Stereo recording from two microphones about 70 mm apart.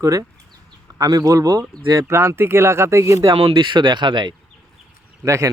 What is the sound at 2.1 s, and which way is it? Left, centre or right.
Speech, right.